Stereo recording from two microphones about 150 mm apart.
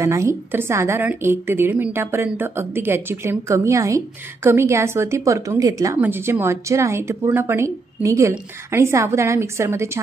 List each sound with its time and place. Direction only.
0.0 s a woman's voice: 20° right (ahead or behind)